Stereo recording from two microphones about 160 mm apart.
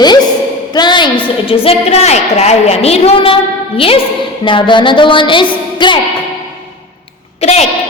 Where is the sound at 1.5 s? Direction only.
35° left (ahead or behind).